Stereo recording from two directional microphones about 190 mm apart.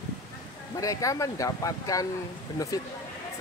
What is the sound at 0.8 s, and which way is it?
Speech, 15° left (ahead or behind).